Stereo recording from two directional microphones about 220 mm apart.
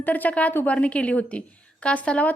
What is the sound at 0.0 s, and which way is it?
A woman's voice, 5° left (ahead or behind).